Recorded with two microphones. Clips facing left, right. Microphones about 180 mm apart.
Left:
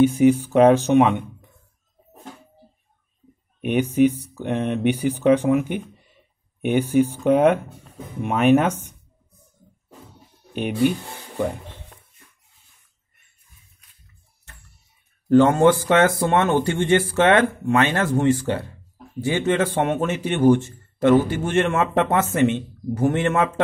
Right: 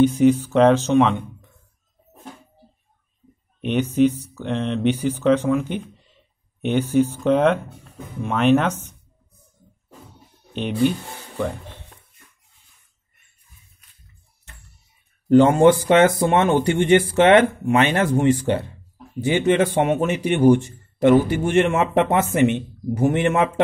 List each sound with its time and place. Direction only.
0.0 s speech: 10° left (ahead or behind)
3.6 s speech: 10° left (ahead or behind)
10.5 s speech: 10° left (ahead or behind)
15.2 s speech: 15° right (ahead or behind)